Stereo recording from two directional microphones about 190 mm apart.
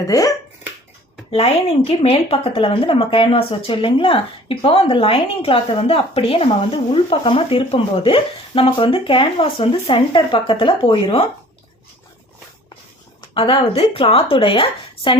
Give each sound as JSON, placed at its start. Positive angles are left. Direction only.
{"t": 0.0, "sound": "speech", "side_deg": 20}
{"t": 1.3, "sound": "speech", "side_deg": 30}
{"t": 13.3, "sound": "speech", "side_deg": 30}